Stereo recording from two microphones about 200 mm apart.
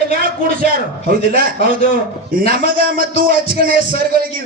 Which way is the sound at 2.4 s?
45° right (ahead or behind).